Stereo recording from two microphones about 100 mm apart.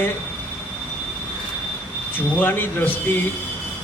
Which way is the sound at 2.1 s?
20° left (ahead or behind).